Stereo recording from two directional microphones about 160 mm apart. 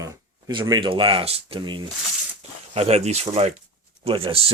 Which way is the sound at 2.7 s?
40° right (ahead or behind).